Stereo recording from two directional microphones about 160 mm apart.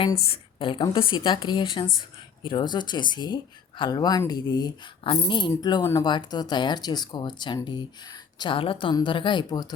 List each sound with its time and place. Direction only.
0.3 s speech: 30° left (ahead or behind)